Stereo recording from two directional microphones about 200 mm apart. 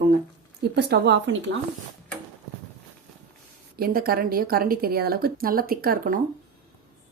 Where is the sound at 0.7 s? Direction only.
55° right (ahead or behind).